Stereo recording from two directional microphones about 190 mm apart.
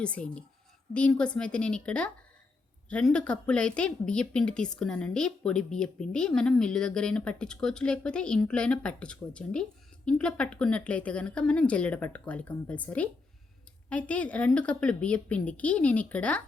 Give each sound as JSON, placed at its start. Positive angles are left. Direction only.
{"t": 0.0, "sound": "a woman's voice", "side_deg": 5}